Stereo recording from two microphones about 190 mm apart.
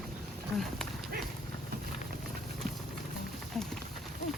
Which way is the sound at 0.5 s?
Centre (ahead or behind).